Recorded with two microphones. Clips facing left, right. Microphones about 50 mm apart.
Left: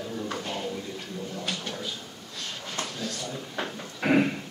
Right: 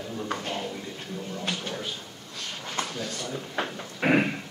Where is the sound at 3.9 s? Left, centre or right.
Right.